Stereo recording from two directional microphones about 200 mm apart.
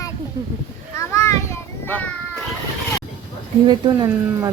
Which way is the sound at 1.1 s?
15° left (ahead or behind).